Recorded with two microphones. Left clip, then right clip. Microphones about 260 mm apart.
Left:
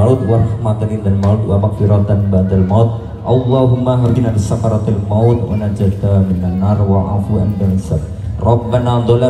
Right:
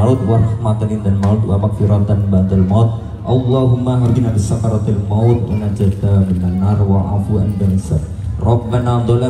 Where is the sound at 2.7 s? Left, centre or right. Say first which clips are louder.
Left 3 dB; centre.